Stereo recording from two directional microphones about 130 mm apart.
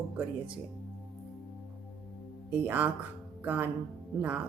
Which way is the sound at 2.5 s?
15° right (ahead or behind).